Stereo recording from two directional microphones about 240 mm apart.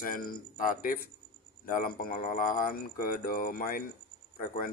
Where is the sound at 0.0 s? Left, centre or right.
Left.